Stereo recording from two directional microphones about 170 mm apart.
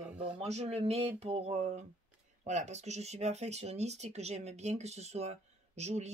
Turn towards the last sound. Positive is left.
turn(degrees=-40)  # may be behind; listen again after turning